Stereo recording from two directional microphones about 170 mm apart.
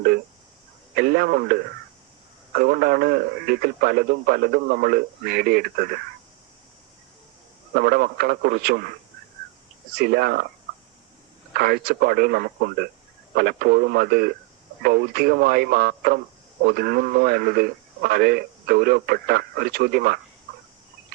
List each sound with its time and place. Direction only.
0.9 s speech: 65° right (ahead or behind)
7.7 s speech: 60° right (ahead or behind)
9.9 s speech: 65° right (ahead or behind)
11.5 s speech: 65° right (ahead or behind)